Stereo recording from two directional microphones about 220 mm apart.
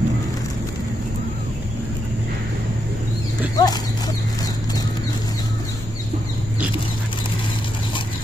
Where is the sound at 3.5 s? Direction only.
15° left (ahead or behind).